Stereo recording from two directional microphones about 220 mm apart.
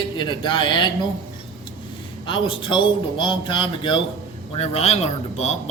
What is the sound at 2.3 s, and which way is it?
Speech, 25° left (ahead or behind).